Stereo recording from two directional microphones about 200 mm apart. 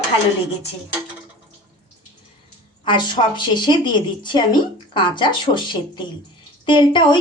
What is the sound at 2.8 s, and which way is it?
Speech, 20° left (ahead or behind).